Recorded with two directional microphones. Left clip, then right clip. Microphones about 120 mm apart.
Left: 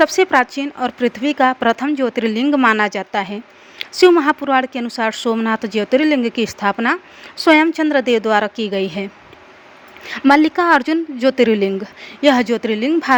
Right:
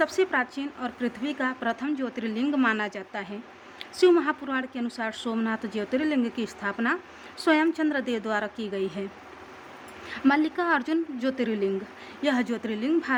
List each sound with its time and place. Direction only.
0.0 s speech: 45° left (ahead or behind)
3.8 s a sound: 45° left (ahead or behind)
4.2 s a woman's voice: 45° left (ahead or behind)
10.1 s speech: 50° left (ahead or behind)